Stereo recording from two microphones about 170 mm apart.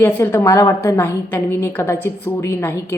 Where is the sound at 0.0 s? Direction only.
15° left (ahead or behind).